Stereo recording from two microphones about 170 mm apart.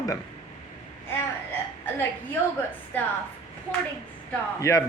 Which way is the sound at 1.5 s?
10° left (ahead or behind).